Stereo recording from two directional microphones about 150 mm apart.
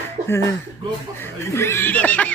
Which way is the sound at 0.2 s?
50° right (ahead or behind).